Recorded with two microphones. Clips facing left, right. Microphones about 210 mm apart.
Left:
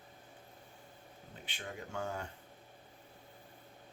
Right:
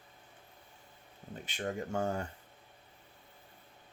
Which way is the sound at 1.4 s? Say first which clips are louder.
Right 9 dB; 45° right (ahead or behind).